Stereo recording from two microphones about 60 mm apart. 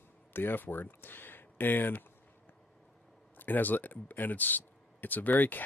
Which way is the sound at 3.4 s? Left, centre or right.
Left.